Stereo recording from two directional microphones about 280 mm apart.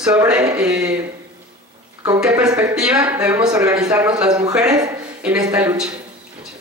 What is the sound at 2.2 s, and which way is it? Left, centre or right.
Speech, centre.